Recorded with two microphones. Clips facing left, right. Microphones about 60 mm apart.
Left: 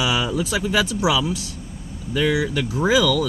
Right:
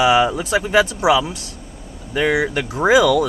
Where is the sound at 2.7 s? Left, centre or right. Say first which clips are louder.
Right 5 dB; right.